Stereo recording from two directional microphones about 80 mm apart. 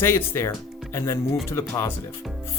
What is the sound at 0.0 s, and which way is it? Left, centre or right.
Speech, left.